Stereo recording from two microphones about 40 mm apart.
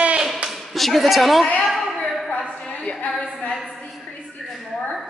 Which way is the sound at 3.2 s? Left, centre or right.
Left.